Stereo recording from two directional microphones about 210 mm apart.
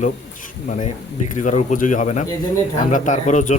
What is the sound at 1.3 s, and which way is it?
Speech, 35° left (ahead or behind).